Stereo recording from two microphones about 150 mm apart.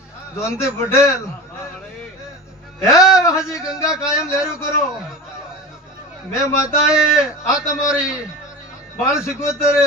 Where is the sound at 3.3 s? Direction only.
5° right (ahead or behind).